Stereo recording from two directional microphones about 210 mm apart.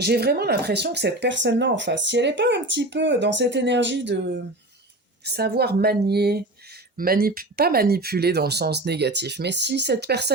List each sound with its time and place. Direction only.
0.0 s speech: 50° right (ahead or behind)